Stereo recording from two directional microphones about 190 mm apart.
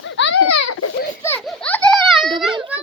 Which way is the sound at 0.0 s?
85° left.